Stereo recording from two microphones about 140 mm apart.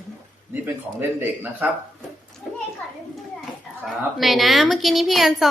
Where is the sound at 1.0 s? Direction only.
15° right (ahead or behind).